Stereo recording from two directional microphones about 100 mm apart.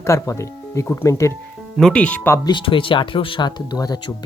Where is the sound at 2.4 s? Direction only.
55° left (ahead or behind).